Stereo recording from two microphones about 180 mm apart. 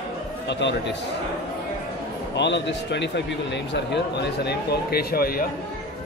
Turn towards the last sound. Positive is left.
turn(degrees=55)  # may be behind; listen again after turning